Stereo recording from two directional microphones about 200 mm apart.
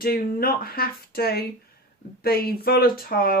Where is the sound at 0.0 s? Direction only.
50° left (ahead or behind).